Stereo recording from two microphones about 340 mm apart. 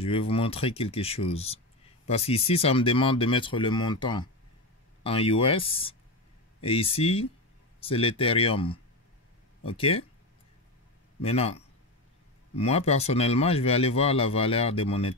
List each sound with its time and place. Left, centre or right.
0.0 s speech: centre
11.2 s speech: centre